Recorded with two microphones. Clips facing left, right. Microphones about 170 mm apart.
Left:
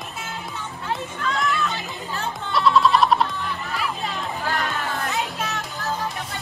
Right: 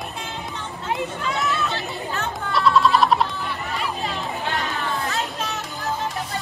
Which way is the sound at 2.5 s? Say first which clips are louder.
Even; centre (ahead or behind).